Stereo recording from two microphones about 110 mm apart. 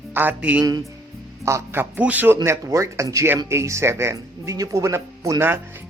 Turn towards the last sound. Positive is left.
turn(degrees=-20)  # may be behind; listen again after turning